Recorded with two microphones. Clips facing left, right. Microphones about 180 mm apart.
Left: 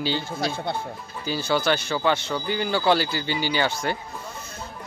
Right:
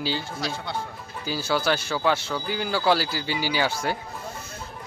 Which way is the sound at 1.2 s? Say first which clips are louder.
Left 2 dB; 5° right (ahead or behind).